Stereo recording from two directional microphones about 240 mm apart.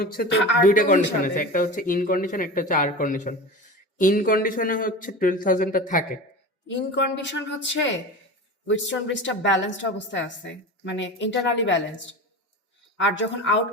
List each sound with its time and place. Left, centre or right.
0.0 s speech: left
6.9 s a woman's voice: left
13.0 s a woman's voice: left